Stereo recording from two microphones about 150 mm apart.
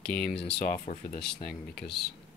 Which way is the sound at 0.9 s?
50° left (ahead or behind).